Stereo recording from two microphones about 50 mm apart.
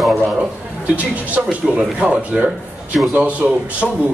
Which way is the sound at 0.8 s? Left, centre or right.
Right.